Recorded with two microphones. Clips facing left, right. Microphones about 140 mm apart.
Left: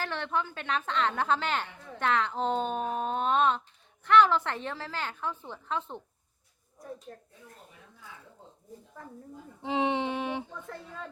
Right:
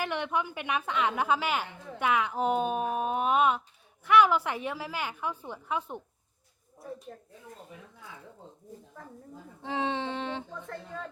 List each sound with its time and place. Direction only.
0.0 s a woman's voice: 15° right (ahead or behind)
7.1 s a woman's voice: centre (ahead or behind)
9.0 s a woman's voice: centre (ahead or behind)
9.6 s a sound: 15° left (ahead or behind)
10.5 s a woman's voice: centre (ahead or behind)